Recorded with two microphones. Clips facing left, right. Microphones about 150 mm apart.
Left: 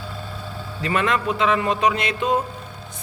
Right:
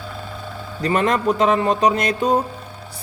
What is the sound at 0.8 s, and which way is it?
Speech, 40° right (ahead or behind).